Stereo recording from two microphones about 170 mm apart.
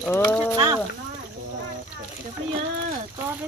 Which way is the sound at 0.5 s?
20° right (ahead or behind).